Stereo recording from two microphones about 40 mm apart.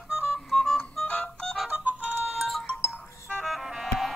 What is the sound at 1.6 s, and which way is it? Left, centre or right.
Music, right.